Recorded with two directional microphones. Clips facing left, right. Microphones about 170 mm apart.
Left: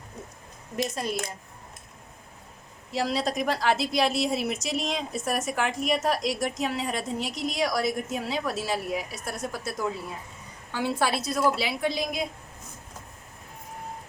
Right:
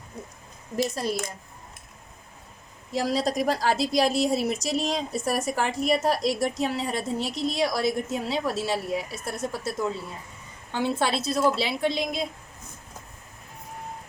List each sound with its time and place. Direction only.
2.9 s a woman's voice: 45° right (ahead or behind); by 12.2 s 25° right (ahead or behind)